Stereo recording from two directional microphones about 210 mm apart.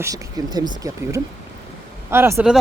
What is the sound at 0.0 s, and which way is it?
Speech, 15° right (ahead or behind).